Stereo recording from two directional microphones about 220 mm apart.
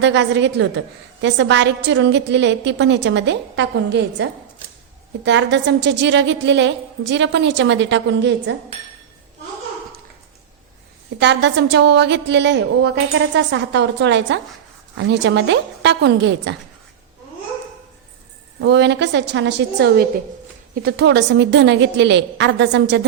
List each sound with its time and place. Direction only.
0.0 s a woman's voice: 55° right (ahead or behind)
11.2 s a woman's voice: 55° right (ahead or behind)
18.6 s a woman's voice: 50° right (ahead or behind)